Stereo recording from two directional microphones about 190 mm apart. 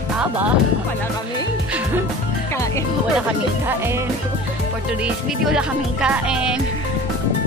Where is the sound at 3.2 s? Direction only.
10° right (ahead or behind).